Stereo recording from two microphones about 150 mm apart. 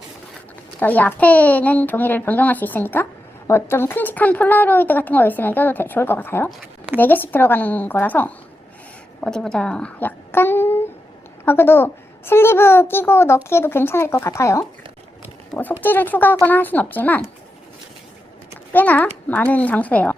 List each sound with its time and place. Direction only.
0.8 s a woman's voice: 10° left (ahead or behind)
15.8 s a woman's voice: 15° left (ahead or behind)
18.7 s a woman's voice: 10° left (ahead or behind)